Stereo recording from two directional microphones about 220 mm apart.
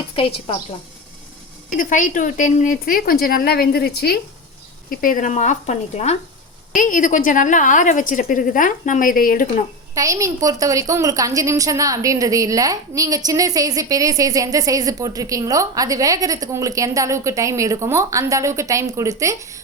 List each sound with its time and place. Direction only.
0.2 s speech: 25° left (ahead or behind)
1.8 s a woman's voice: 35° left (ahead or behind)
9.9 s a woman's voice: 15° right (ahead or behind)